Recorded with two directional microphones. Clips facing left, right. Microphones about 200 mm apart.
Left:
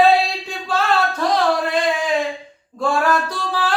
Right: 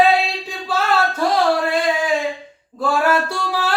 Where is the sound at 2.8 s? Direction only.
5° right (ahead or behind).